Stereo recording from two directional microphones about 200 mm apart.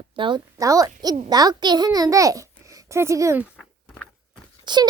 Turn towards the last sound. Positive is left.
turn(degrees=-20)  # may be behind; listen again after turning